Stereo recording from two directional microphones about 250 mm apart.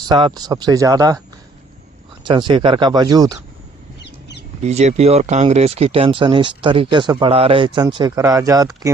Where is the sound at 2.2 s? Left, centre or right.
Centre.